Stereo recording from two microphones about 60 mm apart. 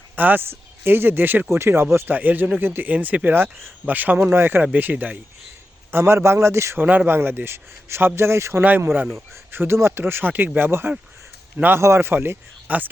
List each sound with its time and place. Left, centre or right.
0.2 s speech: right
2.1 s speech: right
3.8 s a man's voice: right
4.6 s a man's voice: right
5.9 s a man's voice: right
6.7 s a man's voice: right
7.1 s a man's voice: right
10.0 s a man's voice: right
12.6 s speech: right